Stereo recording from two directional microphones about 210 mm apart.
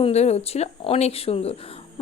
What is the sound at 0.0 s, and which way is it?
A woman's voice, 30° left (ahead or behind).